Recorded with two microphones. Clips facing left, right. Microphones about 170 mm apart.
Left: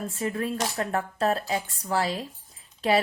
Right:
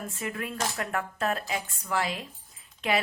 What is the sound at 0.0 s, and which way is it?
Speech, 35° left (ahead or behind).